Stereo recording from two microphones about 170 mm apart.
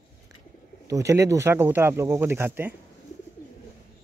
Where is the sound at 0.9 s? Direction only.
20° right (ahead or behind).